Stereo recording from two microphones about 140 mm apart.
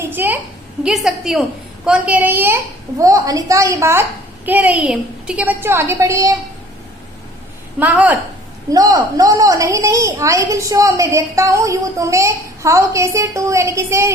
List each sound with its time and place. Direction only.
0.0 s a sound: 15° right (ahead or behind)
0.9 s a woman's voice: 5° right (ahead or behind); by 6.3 s 20° right (ahead or behind)
7.8 s a woman's voice: 10° right (ahead or behind)
8.7 s a woman's voice: 25° right (ahead or behind)